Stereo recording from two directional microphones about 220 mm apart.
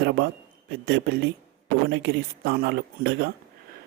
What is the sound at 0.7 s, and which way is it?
Speech, 50° right (ahead or behind).